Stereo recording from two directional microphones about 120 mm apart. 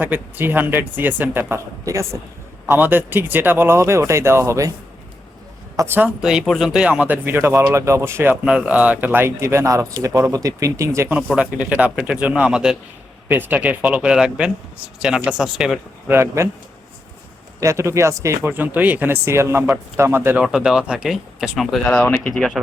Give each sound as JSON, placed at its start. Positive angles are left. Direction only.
{"t": 0.0, "sound": "a man's voice", "side_deg": -15}
{"t": 5.7, "sound": "speech", "side_deg": -20}
{"t": 6.2, "sound": "a man's voice", "side_deg": -5}
{"t": 8.4, "sound": "speech", "side_deg": -10}
{"t": 11.3, "sound": "a man's voice", "side_deg": -10}
{"t": 16.0, "sound": "speech", "side_deg": -20}
{"t": 17.6, "sound": "speech", "side_deg": -25}
{"t": 20.4, "sound": "speech", "side_deg": -5}
{"t": 21.8, "sound": "speech", "side_deg": 10}